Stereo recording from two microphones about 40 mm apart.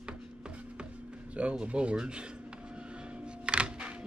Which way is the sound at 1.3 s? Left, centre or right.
Right.